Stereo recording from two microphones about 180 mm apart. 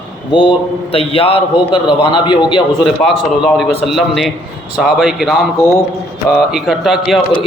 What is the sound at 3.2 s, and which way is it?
A man's voice, centre (ahead or behind).